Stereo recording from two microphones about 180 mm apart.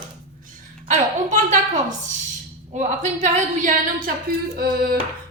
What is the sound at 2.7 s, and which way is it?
A woman's voice, 40° right (ahead or behind).